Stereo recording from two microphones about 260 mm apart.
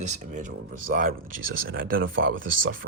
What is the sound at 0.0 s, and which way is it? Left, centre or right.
Speech, right.